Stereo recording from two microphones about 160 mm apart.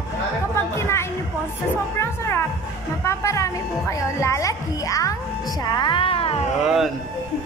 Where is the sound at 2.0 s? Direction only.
15° left (ahead or behind); by 6.3 s 35° left (ahead or behind).